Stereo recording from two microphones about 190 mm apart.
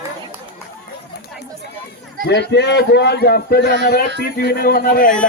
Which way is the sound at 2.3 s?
65° left (ahead or behind).